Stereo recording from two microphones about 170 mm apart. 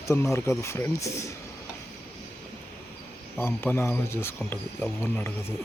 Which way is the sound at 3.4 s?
15° left (ahead or behind).